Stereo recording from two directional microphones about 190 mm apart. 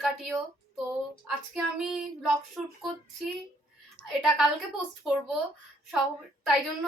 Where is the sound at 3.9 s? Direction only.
Centre (ahead or behind).